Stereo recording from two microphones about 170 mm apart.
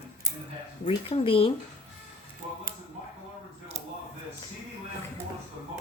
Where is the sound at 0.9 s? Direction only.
30° left (ahead or behind).